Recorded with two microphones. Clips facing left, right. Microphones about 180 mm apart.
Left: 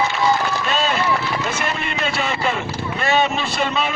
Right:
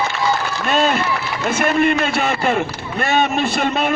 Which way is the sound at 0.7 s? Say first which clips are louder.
Right 7 dB; 50° right (ahead or behind).